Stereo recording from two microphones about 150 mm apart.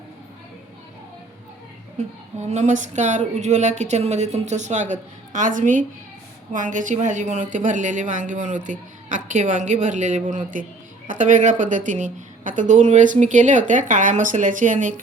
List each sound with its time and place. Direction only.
2.0 s a woman's voice: 50° right (ahead or behind)